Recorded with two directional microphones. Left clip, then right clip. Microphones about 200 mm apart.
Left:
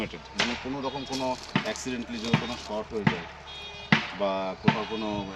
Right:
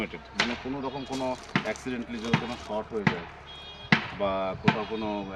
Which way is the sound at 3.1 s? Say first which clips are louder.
Even; 20° right (ahead or behind).